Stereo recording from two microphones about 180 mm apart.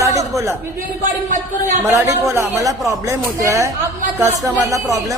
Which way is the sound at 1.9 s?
15° right (ahead or behind).